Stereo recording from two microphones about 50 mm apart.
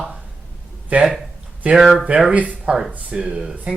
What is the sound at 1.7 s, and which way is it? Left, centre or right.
Speech, centre.